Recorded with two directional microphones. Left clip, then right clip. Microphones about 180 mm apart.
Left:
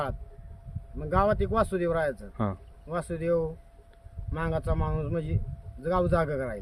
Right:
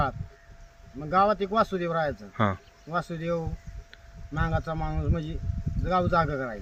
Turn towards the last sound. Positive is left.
turn(degrees=25)  # may be behind; listen again after turning